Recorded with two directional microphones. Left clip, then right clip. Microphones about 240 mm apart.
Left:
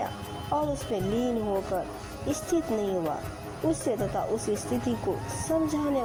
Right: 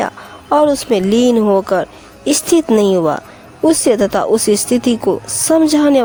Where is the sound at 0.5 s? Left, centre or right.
Right.